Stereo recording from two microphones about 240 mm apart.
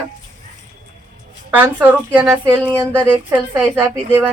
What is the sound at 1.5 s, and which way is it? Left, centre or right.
A woman's voice, centre.